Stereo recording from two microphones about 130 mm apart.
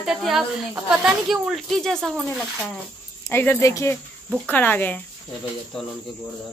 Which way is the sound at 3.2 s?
20° left (ahead or behind).